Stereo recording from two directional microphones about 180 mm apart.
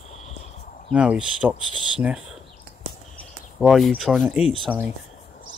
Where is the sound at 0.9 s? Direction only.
5° right (ahead or behind).